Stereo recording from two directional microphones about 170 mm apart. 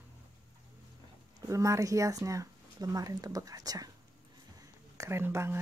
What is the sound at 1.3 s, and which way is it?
Speech, 20° right (ahead or behind).